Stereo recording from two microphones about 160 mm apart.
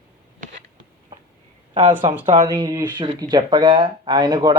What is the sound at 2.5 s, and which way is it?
Speech, 25° right (ahead or behind).